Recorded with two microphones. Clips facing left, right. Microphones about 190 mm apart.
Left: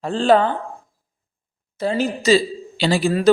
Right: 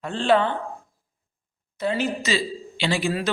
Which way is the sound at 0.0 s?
40° left (ahead or behind).